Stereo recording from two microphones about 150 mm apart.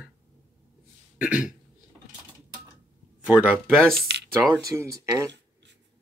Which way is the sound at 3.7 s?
Centre (ahead or behind).